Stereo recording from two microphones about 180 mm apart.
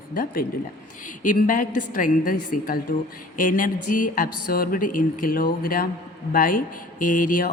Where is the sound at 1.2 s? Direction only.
50° left (ahead or behind).